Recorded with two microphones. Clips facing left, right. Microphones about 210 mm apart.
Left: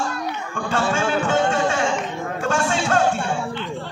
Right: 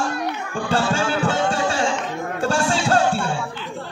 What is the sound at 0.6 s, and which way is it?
Music, 35° right (ahead or behind).